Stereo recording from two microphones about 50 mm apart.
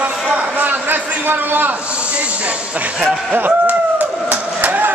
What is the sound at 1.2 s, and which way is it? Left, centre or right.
Speech, right.